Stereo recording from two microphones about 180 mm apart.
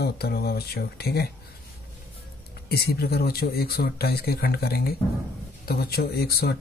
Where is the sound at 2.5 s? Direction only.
60° left (ahead or behind).